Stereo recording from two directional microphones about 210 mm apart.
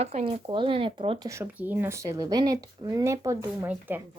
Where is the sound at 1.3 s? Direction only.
10° right (ahead or behind).